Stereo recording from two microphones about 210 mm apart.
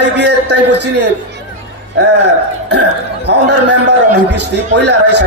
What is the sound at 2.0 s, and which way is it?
Speech, 55° right (ahead or behind).